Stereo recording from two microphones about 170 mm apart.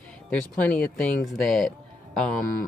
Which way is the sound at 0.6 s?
10° left (ahead or behind).